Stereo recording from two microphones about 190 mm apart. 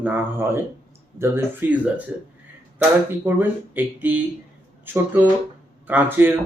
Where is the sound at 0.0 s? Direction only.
10° right (ahead or behind).